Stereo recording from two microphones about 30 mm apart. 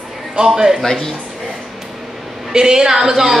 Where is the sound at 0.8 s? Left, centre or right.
Centre.